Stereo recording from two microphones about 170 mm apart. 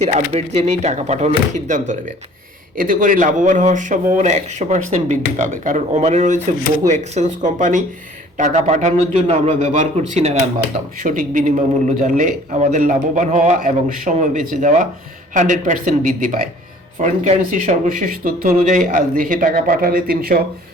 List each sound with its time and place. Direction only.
0.0 s a man's voice: 40° right (ahead or behind); by 20.4 s 60° right (ahead or behind)